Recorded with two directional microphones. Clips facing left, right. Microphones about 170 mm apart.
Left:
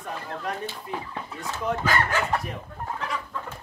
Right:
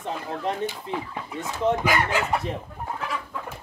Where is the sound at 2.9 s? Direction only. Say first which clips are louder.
Right 1 dB; 5° right (ahead or behind).